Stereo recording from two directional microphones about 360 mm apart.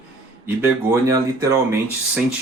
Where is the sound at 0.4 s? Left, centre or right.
Centre.